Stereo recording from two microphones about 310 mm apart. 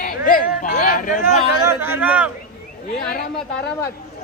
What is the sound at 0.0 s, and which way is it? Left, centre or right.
Speech, left.